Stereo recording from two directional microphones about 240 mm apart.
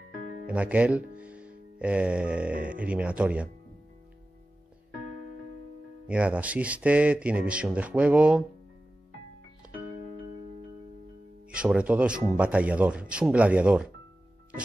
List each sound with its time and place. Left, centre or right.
0.2 s music: left
0.5 s speech: centre
6.0 s speech: centre
11.5 s speech: centre